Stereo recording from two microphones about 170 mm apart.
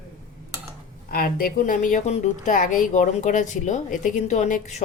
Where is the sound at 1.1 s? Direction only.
60° left (ahead or behind).